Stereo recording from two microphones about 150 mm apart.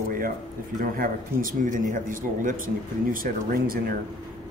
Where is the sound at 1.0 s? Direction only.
65° right (ahead or behind).